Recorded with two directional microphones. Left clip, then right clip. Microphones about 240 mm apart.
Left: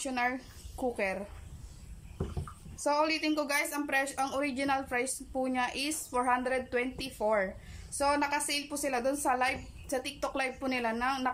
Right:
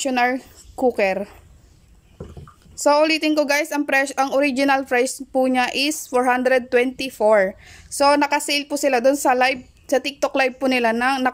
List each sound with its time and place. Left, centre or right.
0.0 s a woman's voice: right
2.7 s a woman's voice: right